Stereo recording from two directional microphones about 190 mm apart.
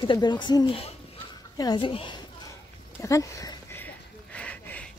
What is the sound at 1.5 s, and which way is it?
Speech, 25° left (ahead or behind).